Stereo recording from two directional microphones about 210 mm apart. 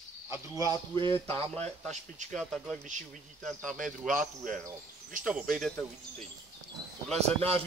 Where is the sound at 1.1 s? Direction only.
10° left (ahead or behind).